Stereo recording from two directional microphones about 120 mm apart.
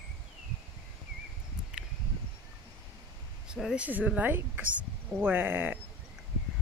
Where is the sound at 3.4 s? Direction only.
5° right (ahead or behind).